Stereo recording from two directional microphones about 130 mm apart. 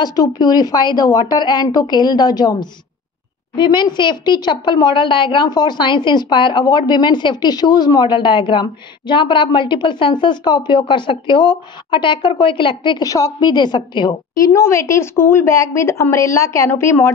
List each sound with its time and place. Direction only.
0.0 s a woman's voice: 30° left (ahead or behind)